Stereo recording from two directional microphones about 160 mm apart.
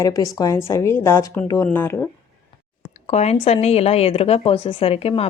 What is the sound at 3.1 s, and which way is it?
A woman's voice, 45° left (ahead or behind).